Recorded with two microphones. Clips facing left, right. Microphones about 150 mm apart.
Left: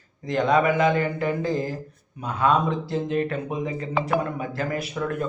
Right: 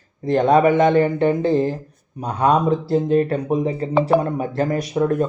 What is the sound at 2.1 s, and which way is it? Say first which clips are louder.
Speech: right 4 dB; 40° right (ahead or behind).